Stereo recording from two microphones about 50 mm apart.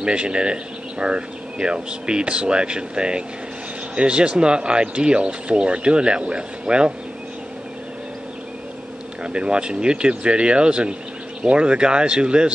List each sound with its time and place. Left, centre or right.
0.0 s speech: centre
9.2 s speech: centre